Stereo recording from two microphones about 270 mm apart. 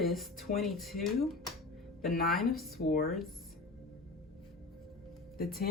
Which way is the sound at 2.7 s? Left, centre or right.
Left.